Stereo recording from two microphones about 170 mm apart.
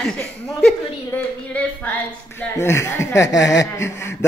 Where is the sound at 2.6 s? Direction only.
15° left (ahead or behind).